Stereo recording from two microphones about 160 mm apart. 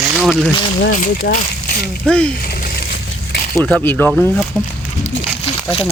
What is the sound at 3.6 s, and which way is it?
Speech, 10° left (ahead or behind).